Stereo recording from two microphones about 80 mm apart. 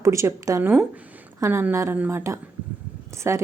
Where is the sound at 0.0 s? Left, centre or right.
Right.